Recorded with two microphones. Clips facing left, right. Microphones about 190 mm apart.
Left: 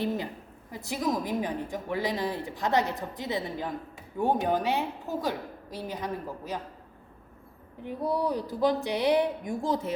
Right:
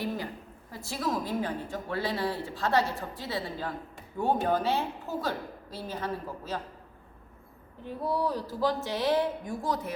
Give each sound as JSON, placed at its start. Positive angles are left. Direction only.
{"t": 0.7, "sound": "a woman's voice", "side_deg": 20}
{"t": 7.9, "sound": "a woman's voice", "side_deg": 15}